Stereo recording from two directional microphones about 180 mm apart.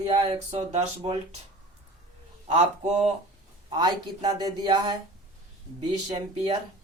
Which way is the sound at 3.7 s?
25° right (ahead or behind).